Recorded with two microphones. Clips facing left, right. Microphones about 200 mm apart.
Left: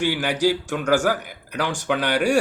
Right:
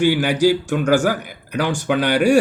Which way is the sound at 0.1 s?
10° right (ahead or behind).